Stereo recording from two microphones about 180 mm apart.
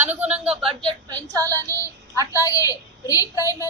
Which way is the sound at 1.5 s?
15° left (ahead or behind).